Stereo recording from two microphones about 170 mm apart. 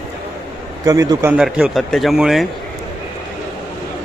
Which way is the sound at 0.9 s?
20° right (ahead or behind).